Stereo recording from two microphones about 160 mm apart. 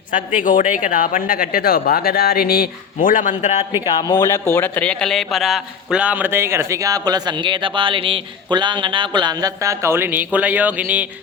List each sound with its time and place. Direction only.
0.1 s a man's voice: 55° left (ahead or behind)
3.8 s a man's voice: 25° left (ahead or behind); by 11.0 s 10° right (ahead or behind)